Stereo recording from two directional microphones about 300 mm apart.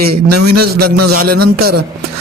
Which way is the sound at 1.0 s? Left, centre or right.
Right.